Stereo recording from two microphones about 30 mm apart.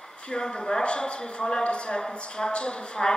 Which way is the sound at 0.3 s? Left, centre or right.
Left.